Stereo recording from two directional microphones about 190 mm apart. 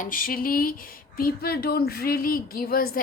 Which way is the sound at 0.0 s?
45° left (ahead or behind).